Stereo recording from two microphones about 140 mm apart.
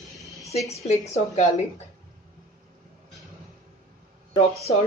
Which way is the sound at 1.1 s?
50° left (ahead or behind).